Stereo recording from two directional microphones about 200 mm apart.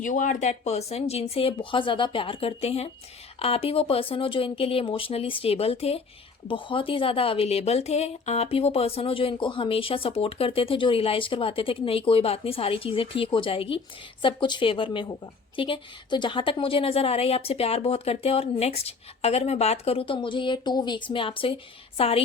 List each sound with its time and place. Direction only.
0.0 s a woman's voice: 40° left (ahead or behind)